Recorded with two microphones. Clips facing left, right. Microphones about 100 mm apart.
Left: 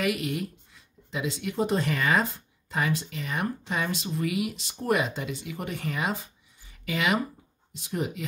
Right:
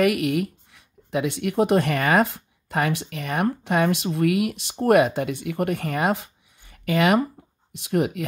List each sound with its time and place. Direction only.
0.0 s speech: 65° right (ahead or behind)
7.7 s speech: 70° right (ahead or behind)